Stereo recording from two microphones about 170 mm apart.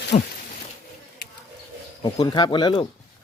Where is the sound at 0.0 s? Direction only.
80° left.